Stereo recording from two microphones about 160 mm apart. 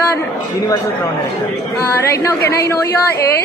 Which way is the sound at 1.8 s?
15° left (ahead or behind).